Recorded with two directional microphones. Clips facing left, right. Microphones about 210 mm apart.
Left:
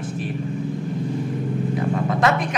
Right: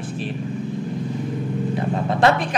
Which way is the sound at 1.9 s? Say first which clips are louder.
Right 3 dB; 30° right (ahead or behind).